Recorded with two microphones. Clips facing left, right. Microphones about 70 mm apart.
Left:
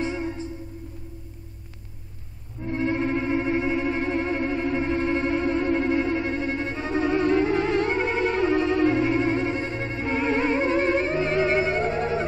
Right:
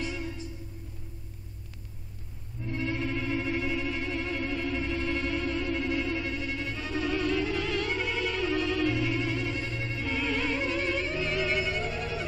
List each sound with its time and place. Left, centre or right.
0.0 s music: left
2.6 s music: left